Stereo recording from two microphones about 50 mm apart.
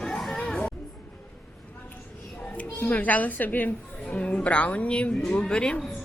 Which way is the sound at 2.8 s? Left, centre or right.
Left.